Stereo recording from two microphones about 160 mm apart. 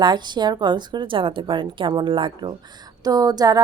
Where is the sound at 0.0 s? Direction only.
25° right (ahead or behind).